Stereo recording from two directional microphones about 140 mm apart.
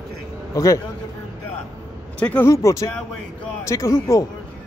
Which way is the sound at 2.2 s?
15° left (ahead or behind).